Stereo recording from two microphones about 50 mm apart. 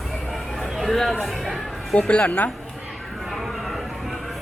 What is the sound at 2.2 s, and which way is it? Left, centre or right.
Speech, left.